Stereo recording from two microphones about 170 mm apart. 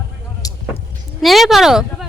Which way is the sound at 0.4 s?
20° left (ahead or behind).